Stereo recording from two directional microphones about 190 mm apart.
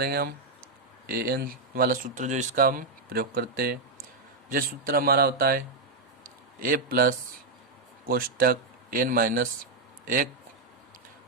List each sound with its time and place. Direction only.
0.0 s speech: 55° right (ahead or behind)
6.2 s a sound: 50° right (ahead or behind)
8.0 s speech: 50° right (ahead or behind)